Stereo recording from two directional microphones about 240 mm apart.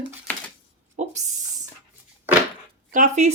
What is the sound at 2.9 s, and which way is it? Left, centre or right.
Speech, right.